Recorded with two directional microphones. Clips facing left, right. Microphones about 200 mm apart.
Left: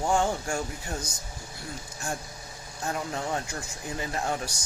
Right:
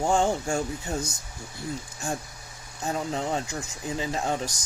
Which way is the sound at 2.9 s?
20° right (ahead or behind).